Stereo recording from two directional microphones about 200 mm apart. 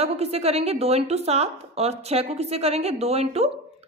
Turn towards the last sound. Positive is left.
turn(degrees=-30)  # may be behind; listen again after turning